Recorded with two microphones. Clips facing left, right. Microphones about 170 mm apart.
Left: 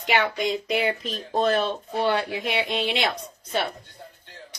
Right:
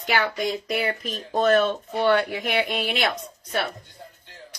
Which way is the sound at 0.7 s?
25° left (ahead or behind).